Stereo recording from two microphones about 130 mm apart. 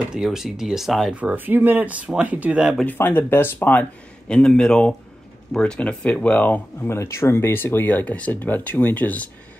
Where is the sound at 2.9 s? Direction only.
15° left (ahead or behind).